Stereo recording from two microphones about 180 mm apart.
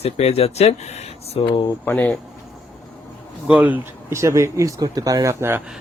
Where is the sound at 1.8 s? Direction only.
10° left (ahead or behind).